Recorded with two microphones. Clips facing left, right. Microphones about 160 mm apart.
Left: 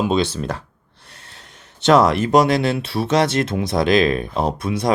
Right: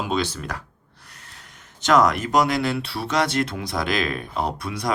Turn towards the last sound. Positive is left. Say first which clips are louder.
# left 6 dB
turn(degrees=20)  # may be behind; listen again after turning